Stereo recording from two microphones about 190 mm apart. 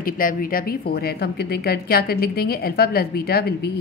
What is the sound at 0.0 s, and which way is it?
A woman's voice, 45° left (ahead or behind).